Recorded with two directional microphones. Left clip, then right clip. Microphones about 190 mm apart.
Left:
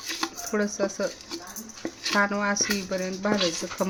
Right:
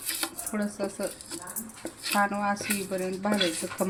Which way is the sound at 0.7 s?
30° left (ahead or behind).